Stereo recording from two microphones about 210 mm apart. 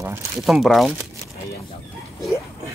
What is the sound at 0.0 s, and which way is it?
Speech, 5° right (ahead or behind).